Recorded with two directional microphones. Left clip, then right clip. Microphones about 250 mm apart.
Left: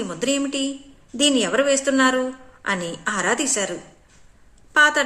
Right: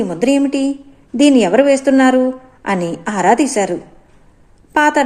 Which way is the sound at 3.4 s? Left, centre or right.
Centre.